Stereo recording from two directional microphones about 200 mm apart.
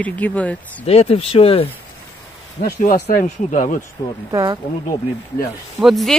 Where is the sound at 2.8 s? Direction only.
40° left (ahead or behind).